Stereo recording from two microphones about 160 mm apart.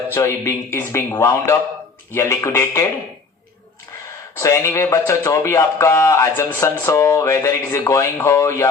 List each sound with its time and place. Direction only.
0.1 s a man's voice: 15° left (ahead or behind)
4.4 s a man's voice: 20° left (ahead or behind)